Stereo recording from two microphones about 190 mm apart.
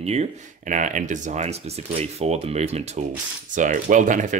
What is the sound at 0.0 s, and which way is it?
Speech, 35° right (ahead or behind).